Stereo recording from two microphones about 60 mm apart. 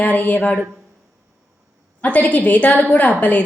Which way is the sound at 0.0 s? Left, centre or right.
Left.